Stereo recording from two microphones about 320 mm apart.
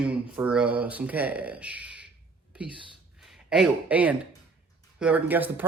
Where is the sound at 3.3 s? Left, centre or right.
Centre.